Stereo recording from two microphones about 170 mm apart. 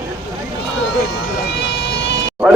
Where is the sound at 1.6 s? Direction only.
90° left.